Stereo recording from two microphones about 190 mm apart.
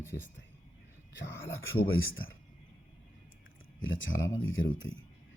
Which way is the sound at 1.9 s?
90° left.